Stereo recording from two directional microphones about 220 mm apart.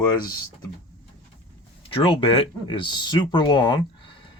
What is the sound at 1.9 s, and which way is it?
Speech, 25° left (ahead or behind).